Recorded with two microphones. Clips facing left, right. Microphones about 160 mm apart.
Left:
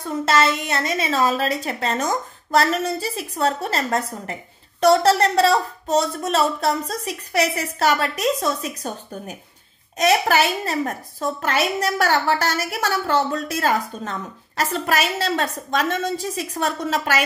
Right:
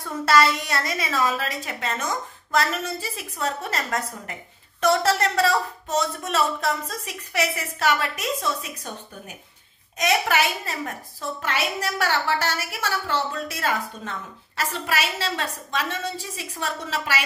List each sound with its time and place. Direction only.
0.0 s a woman's voice: 20° left (ahead or behind); by 8.9 s 35° left (ahead or behind)
9.9 s a woman's voice: 35° left (ahead or behind)